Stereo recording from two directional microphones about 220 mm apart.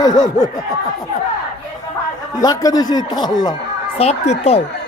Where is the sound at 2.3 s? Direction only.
15° left (ahead or behind).